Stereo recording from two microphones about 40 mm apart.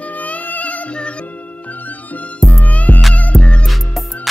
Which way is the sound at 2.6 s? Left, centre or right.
Left.